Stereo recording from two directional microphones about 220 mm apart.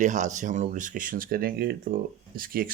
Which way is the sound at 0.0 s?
35° right (ahead or behind).